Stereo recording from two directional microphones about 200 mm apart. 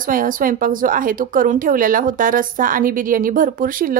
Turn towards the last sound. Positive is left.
turn(degrees=-45)  # may be behind; listen again after turning